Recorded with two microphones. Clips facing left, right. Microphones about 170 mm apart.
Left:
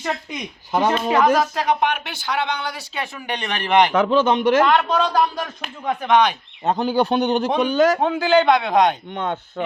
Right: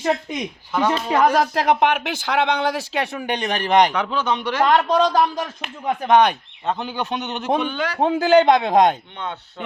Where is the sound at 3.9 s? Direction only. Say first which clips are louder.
Left 6 dB; 45° left (ahead or behind).